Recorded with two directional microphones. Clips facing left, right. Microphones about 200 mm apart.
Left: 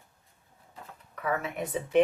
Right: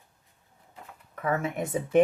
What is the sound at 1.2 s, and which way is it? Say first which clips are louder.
Speech: right 3 dB; 45° right (ahead or behind).